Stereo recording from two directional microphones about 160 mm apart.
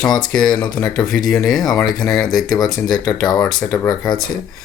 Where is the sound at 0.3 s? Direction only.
5° left (ahead or behind).